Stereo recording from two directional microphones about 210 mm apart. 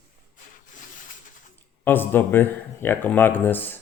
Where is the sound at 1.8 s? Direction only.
10° left (ahead or behind).